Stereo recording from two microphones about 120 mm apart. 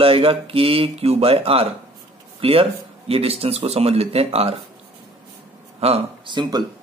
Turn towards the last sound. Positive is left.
turn(degrees=-35)  # may be behind; listen again after turning